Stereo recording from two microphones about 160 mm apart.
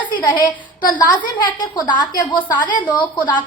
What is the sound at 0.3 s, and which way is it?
A woman's voice, 25° left (ahead or behind).